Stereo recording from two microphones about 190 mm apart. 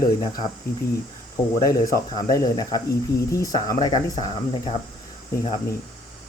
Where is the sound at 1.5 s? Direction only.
20° left (ahead or behind).